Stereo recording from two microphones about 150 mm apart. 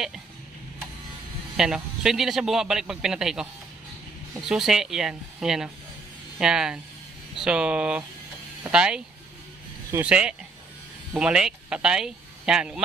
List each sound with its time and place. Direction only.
1.6 s speech: 5° right (ahead or behind)
4.5 s speech: 5° right (ahead or behind)